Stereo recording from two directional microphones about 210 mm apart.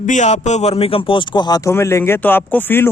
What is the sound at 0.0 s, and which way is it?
A man's voice, 35° left (ahead or behind).